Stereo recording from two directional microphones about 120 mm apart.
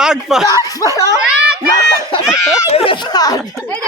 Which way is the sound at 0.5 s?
25° right (ahead or behind).